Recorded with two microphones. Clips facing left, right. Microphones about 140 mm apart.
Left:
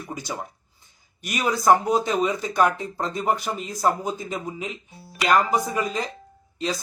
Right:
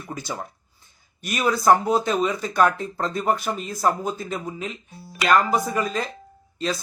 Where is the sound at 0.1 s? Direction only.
15° left (ahead or behind).